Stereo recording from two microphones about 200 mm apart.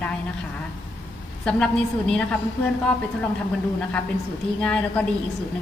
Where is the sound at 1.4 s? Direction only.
5° left (ahead or behind).